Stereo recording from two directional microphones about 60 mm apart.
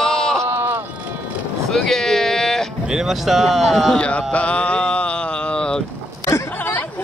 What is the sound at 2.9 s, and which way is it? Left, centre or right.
Speech, centre.